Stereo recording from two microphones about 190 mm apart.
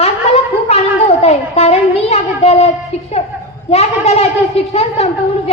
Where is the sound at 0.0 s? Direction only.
35° left (ahead or behind).